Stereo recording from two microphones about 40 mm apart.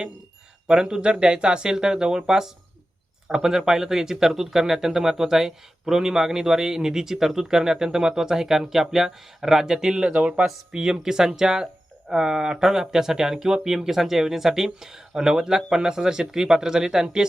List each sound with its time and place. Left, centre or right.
0.7 s speech: centre
10.1 s speech: right
10.4 s speech: centre